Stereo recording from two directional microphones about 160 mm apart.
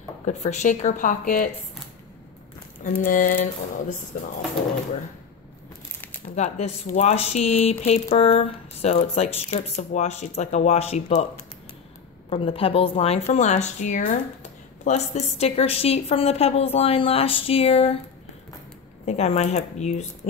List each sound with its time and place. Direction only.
0.3 s speech: 45° left (ahead or behind)
2.8 s a sound: 60° left (ahead or behind)
6.2 s speech: 45° left (ahead or behind)
12.3 s speech: 35° left (ahead or behind)
19.0 s speech: 45° left (ahead or behind)